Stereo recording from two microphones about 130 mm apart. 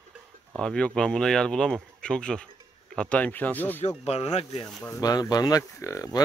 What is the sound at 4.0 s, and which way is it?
Speech, 55° left (ahead or behind).